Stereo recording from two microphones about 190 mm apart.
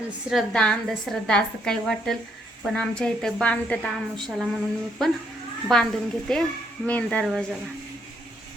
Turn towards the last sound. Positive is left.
turn(degrees=0)  # may be behind; listen again after turning